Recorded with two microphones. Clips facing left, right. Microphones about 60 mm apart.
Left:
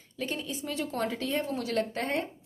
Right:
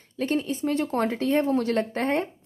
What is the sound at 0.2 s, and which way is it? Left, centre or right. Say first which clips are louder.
Speech: right 9 dB; right.